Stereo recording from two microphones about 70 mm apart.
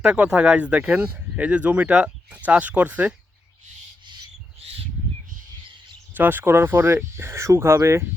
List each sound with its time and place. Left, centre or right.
0.0 s speech: centre
6.1 s speech: right